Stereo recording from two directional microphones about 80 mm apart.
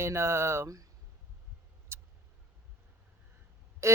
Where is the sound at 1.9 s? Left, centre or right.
Right.